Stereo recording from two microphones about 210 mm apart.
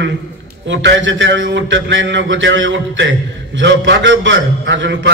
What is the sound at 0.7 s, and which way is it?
A man's voice, 60° right (ahead or behind).